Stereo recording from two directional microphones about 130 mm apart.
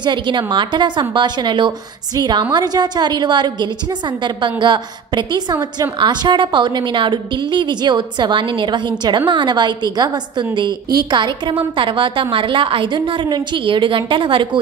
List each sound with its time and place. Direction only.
0.0 s a woman's voice: 35° right (ahead or behind)